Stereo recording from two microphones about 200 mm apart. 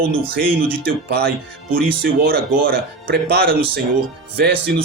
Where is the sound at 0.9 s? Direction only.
50° right (ahead or behind).